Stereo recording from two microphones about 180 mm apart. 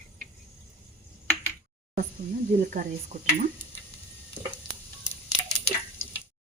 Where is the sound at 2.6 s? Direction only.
45° right (ahead or behind).